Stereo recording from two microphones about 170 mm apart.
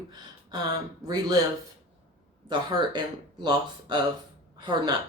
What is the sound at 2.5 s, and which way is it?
Speech, 25° right (ahead or behind).